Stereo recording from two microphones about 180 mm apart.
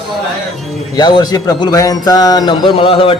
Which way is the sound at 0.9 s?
25° left (ahead or behind).